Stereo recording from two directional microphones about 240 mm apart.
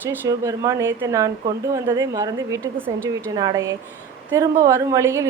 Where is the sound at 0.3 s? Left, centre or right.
Centre.